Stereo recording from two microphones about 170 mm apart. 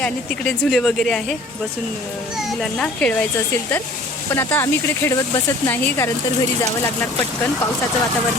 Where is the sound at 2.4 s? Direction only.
Centre (ahead or behind).